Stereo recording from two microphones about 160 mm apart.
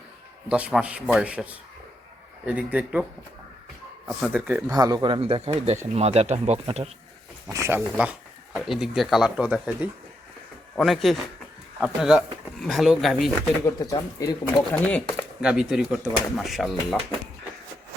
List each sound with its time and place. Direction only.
0.4 s speech: 5° right (ahead or behind)
4.7 s speech: 25° right (ahead or behind); by 6.9 s 40° right (ahead or behind)
7.7 s speech: 10° right (ahead or behind)
13.7 s speech: 25° left (ahead or behind)
15.4 s speech: 5° right (ahead or behind)